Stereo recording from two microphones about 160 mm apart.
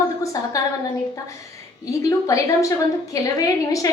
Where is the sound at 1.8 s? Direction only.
20° left (ahead or behind).